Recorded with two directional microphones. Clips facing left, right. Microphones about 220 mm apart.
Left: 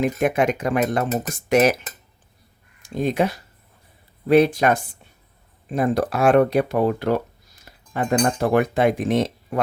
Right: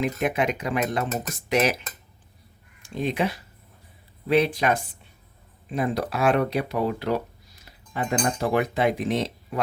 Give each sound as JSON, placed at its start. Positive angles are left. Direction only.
{"t": 0.0, "sound": "speech", "side_deg": 45}
{"t": 2.8, "sound": "speech", "side_deg": 45}